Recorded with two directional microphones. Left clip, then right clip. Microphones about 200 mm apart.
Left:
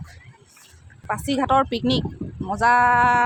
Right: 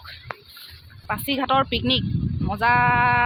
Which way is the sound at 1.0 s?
20° left (ahead or behind).